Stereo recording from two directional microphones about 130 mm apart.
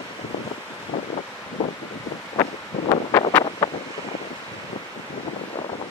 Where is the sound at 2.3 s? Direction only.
40° left (ahead or behind).